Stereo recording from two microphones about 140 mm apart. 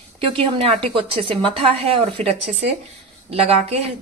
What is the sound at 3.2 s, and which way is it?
Speech, 45° right (ahead or behind).